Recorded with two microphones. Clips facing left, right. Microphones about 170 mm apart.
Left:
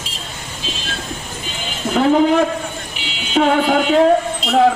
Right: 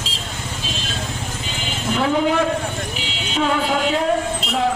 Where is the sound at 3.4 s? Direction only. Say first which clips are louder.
Left 6 dB; 50° left (ahead or behind).